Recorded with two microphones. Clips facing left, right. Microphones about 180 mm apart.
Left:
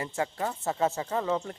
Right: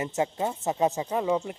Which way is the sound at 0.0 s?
20° right (ahead or behind).